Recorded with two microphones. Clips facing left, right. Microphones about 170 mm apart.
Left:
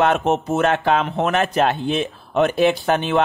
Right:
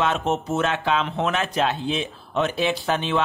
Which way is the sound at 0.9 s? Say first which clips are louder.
Left 4 dB; 45° left (ahead or behind).